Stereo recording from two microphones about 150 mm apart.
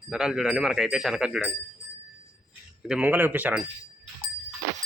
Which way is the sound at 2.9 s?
10° right (ahead or behind).